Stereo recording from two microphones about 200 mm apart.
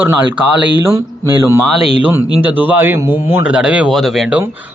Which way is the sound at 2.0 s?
10° right (ahead or behind).